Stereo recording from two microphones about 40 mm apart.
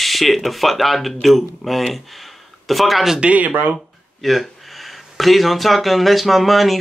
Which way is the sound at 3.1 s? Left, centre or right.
Right.